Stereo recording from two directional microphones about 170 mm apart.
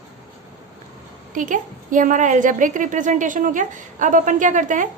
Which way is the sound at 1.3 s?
50° right (ahead or behind).